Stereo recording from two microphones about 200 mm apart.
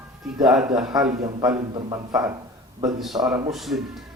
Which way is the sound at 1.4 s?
20° right (ahead or behind).